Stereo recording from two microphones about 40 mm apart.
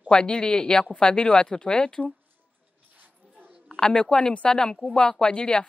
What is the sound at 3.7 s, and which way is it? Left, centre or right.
A woman's voice, left.